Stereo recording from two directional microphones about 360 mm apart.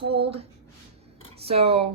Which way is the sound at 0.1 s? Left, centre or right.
Centre.